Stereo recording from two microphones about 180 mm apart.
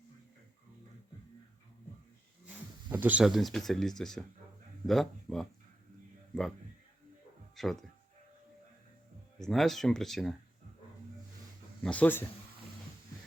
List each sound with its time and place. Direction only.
2.9 s speech: 10° right (ahead or behind)
7.5 s speech: centre (ahead or behind)
9.4 s speech: centre (ahead or behind)
11.8 s speech: 5° left (ahead or behind)